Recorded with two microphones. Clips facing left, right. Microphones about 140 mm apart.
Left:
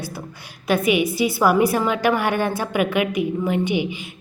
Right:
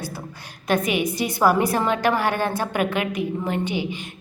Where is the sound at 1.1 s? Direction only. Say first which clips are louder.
Left 1 dB; 5° left (ahead or behind).